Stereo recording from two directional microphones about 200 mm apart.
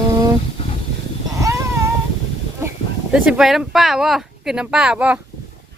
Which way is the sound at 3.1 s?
5° right (ahead or behind).